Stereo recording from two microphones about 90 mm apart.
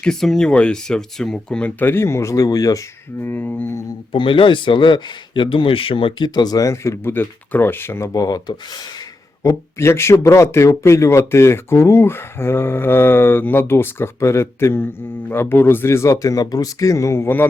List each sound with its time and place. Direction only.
0.0 s speech: 5° left (ahead or behind)
1.8 s speech: 25° left (ahead or behind); by 2.8 s 40° left (ahead or behind)
3.2 s speech: 20° left (ahead or behind)
4.1 s speech: 75° left (ahead or behind); by 8.1 s 30° left (ahead or behind)
8.1 s speech: 45° left (ahead or behind); by 17.4 s 25° left (ahead or behind)